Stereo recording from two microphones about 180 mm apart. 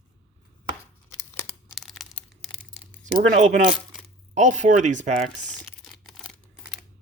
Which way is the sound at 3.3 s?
40° right (ahead or behind).